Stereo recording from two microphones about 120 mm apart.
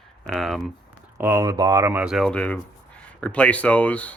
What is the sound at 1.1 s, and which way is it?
Speech, 20° right (ahead or behind).